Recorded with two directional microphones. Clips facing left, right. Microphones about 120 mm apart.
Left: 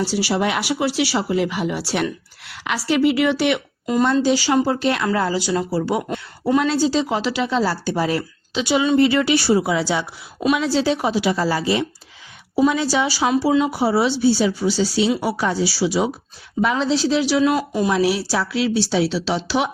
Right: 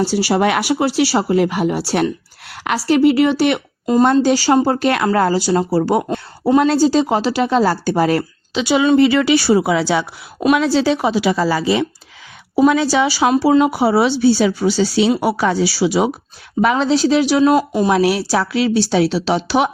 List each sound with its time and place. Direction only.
0.0 s a woman's voice: 45° right (ahead or behind)
5.3 s a woman's voice: 40° right (ahead or behind)
6.1 s a sound: 30° right (ahead or behind)
6.6 s a woman's voice: 45° right (ahead or behind); by 11.3 s 90° right
12.5 s a woman's voice: 85° right; by 15.1 s 70° right (ahead or behind)
15.1 s speech: 50° right (ahead or behind)
15.4 s speech: 70° right (ahead or behind); by 17.7 s 40° right (ahead or behind)
17.8 s speech: 60° right (ahead or behind)